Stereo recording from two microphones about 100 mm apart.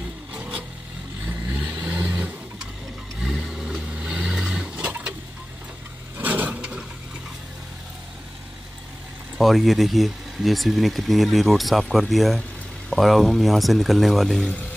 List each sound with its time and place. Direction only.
0.3 s vehicle: 15° right (ahead or behind)
6.1 s a sound: 15° right (ahead or behind)
9.4 s speech: centre (ahead or behind)